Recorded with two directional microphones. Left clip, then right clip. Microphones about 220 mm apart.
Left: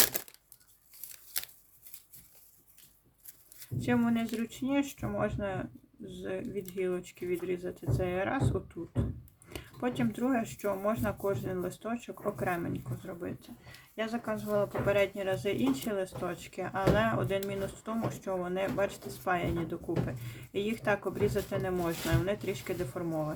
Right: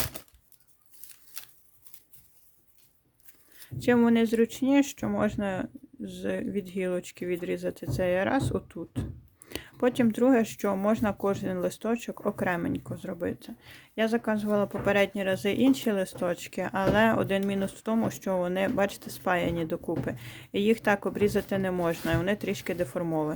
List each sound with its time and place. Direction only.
3.8 s speech: 45° right (ahead or behind)